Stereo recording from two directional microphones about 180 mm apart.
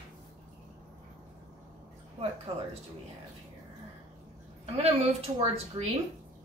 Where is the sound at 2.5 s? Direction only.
35° right (ahead or behind).